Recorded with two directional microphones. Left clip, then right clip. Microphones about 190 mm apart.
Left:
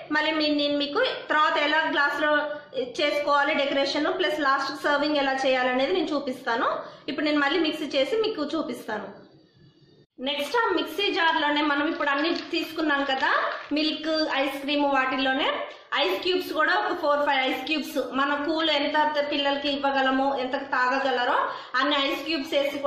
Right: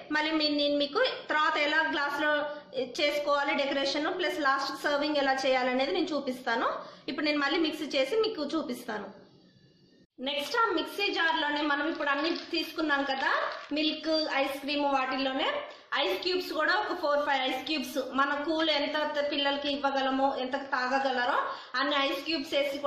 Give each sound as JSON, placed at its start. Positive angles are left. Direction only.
{"t": 0.1, "sound": "a woman's voice", "side_deg": -25}
{"t": 10.2, "sound": "a woman's voice", "side_deg": -5}